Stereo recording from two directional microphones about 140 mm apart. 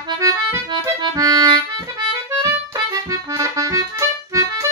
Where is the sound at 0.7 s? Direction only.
25° right (ahead or behind).